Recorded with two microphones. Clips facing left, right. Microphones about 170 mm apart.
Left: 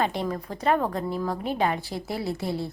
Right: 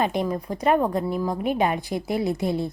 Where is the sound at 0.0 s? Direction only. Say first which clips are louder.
Right 3 dB; 15° right (ahead or behind).